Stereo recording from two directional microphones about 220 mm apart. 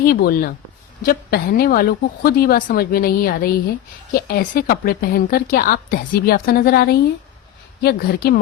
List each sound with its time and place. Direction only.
0.0 s speech: 40° left (ahead or behind)